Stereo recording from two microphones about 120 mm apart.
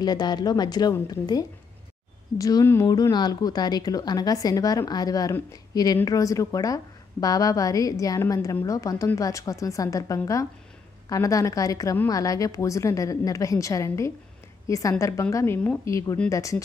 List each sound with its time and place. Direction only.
0.0 s a woman's voice: 35° left (ahead or behind)